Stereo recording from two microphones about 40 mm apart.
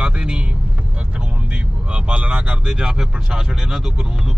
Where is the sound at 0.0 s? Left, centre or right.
Right.